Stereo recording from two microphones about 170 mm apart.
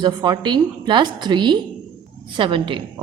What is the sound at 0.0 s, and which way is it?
A woman's voice, 25° right (ahead or behind).